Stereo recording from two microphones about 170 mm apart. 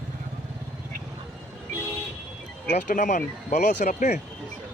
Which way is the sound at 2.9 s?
50° left (ahead or behind).